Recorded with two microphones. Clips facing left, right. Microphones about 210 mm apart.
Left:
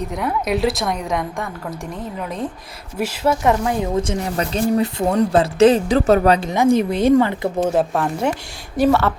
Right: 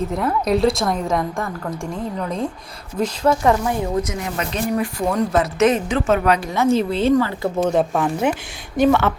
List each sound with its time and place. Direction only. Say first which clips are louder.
0.1 s a woman's voice: even; centre (ahead or behind)
3.4 s a woman's voice: even; 20° left (ahead or behind)
6.5 s speech: left 2 dB; 15° left (ahead or behind)
7.7 s a woman's voice: even; centre (ahead or behind)